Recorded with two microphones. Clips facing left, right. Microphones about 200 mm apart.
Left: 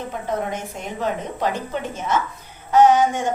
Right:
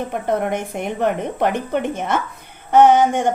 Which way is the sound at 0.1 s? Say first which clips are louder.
Right 4 dB; 60° right (ahead or behind).